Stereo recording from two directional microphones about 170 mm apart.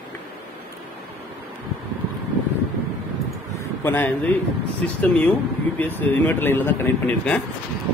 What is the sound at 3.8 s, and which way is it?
Speech, 10° left (ahead or behind).